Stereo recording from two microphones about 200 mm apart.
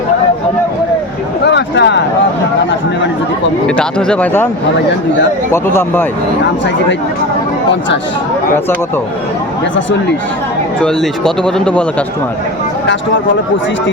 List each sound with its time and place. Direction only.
1.5 s a sound: 60° left (ahead or behind)
3.8 s speech: 5° left (ahead or behind)
5.5 s speech: 10° left (ahead or behind)
10.8 s speech: 5° left (ahead or behind)